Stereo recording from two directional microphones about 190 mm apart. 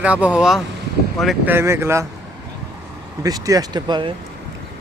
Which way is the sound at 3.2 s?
20° right (ahead or behind).